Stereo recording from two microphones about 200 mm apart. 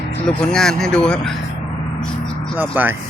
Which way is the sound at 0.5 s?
5° left (ahead or behind).